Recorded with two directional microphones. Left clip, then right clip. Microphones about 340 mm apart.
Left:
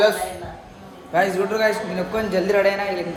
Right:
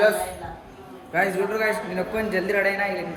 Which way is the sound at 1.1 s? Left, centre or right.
Centre.